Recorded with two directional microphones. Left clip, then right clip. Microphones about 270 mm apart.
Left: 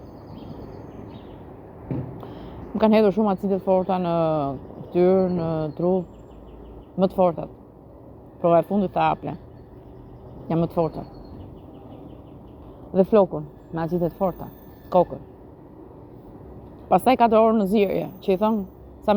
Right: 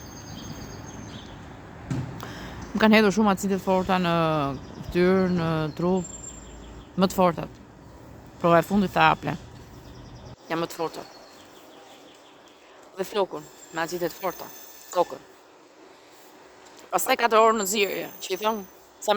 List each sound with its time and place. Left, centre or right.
2.1 s a woman's voice: centre
7.0 s speech: centre
10.5 s speech: centre
13.0 s speech: centre
16.9 s speech: centre